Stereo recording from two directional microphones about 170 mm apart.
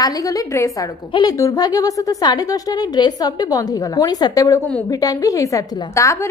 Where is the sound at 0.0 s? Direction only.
20° left (ahead or behind).